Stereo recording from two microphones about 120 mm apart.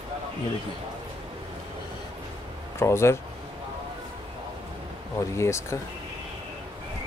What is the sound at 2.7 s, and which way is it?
Speech, 20° left (ahead or behind).